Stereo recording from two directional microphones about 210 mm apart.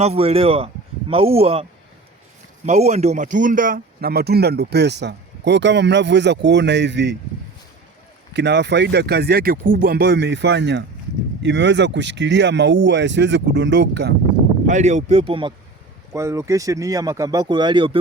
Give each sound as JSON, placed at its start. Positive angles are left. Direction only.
{"t": 0.0, "sound": "a man's voice", "side_deg": -30}
{"t": 2.6, "sound": "speech", "side_deg": -30}
{"t": 8.3, "sound": "speech", "side_deg": -55}
{"t": 14.7, "sound": "a man's voice", "side_deg": -35}
{"t": 16.1, "sound": "speech", "side_deg": -15}